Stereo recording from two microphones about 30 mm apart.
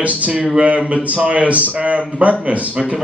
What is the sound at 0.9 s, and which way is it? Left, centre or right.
Speech, right.